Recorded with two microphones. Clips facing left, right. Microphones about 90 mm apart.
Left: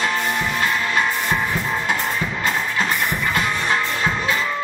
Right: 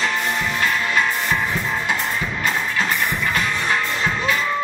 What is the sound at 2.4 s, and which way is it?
Music, 25° left (ahead or behind).